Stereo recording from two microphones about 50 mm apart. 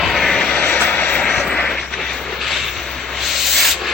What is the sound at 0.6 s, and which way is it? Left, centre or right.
Vehicle, left.